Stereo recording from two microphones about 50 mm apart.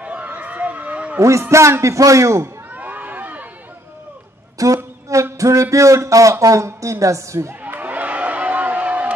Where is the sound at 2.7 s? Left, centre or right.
Right.